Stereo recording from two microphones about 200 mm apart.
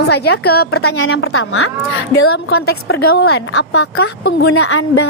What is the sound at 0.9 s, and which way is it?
Speech, 90° left.